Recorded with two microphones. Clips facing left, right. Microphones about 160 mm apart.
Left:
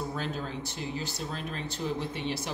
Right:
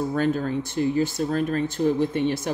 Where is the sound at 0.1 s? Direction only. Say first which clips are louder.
Right 11 dB; 55° right (ahead or behind).